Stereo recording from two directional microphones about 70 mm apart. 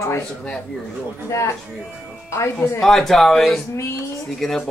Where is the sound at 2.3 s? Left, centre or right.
Left.